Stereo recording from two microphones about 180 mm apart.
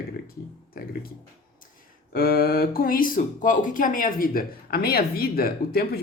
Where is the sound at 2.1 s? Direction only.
55° left (ahead or behind).